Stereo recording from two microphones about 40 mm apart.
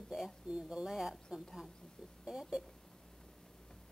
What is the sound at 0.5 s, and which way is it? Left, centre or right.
Speech, right.